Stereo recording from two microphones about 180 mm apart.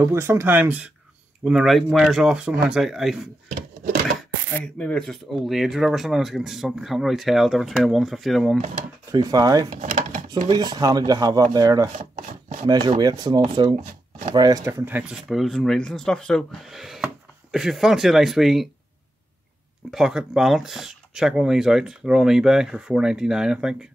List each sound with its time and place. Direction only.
0.0 s speech: 15° right (ahead or behind)
3.5 s drawer open or close: 55° right (ahead or behind)
4.6 s speech: 5° left (ahead or behind)
9.1 s speech: 20° right (ahead or behind)
9.8 s a sound: 50° right (ahead or behind)
10.5 s speech: 25° right (ahead or behind); by 18.7 s centre (ahead or behind)
19.9 s speech: 5° right (ahead or behind)